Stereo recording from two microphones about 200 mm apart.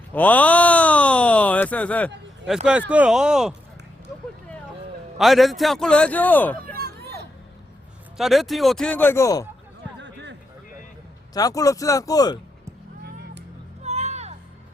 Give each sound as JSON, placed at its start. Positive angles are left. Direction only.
{"t": 0.1, "sound": "a sound", "side_deg": 10}
{"t": 2.9, "sound": "a man's voice", "side_deg": -5}
{"t": 5.1, "sound": "a man's voice", "side_deg": 0}
{"t": 8.2, "sound": "a man's voice", "side_deg": 0}
{"t": 10.0, "sound": "a sound", "side_deg": -65}
{"t": 11.3, "sound": "speech", "side_deg": 15}
{"t": 13.8, "sound": "music", "side_deg": -35}